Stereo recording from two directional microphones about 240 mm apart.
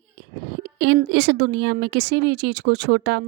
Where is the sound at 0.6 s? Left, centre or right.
Right.